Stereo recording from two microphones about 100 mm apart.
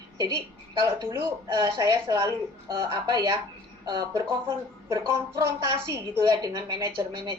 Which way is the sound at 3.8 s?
50° right (ahead or behind).